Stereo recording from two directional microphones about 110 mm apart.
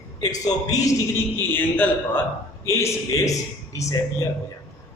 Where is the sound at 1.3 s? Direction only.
15° left (ahead or behind).